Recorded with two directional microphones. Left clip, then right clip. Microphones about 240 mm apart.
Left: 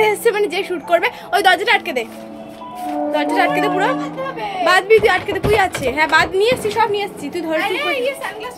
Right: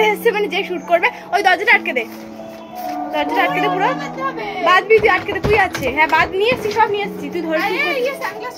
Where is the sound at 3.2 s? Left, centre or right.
Centre.